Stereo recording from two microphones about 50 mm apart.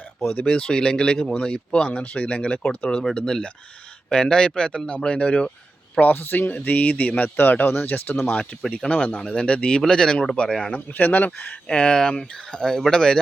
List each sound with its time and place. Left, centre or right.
0.2 s speech: left
6.0 s speech: left
7.3 s speech: left
8.7 s speech: left
10.8 s speech: left
11.7 s speech: centre